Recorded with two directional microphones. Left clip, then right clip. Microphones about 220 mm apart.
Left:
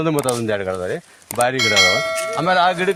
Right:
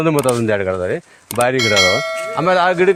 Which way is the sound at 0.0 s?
30° right (ahead or behind).